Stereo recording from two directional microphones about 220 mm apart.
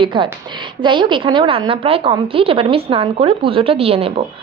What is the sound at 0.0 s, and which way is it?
A woman's voice, 20° right (ahead or behind).